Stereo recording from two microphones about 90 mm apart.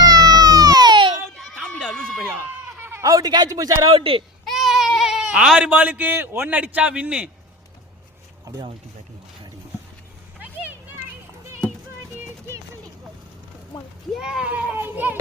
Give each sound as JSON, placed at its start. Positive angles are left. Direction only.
{"t": 0.0, "sound": "music", "side_deg": -45}
{"t": 1.4, "sound": "a sound", "side_deg": 0}
{"t": 1.7, "sound": "a sound", "side_deg": 10}
{"t": 2.7, "sound": "bleat", "side_deg": -25}
{"t": 3.0, "sound": "speech", "side_deg": -40}
{"t": 3.9, "sound": "speech", "side_deg": -90}
{"t": 4.4, "sound": "sheep", "side_deg": 0}
{"t": 5.7, "sound": "a man's voice", "side_deg": -20}
{"t": 14.1, "sound": "goat", "side_deg": -10}